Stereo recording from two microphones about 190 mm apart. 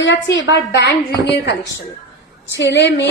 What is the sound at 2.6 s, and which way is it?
Speech, 65° left (ahead or behind).